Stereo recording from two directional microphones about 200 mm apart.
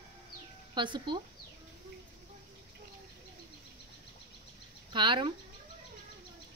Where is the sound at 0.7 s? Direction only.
25° right (ahead or behind).